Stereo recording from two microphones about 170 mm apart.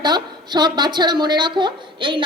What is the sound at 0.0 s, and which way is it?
A woman's voice, 25° right (ahead or behind).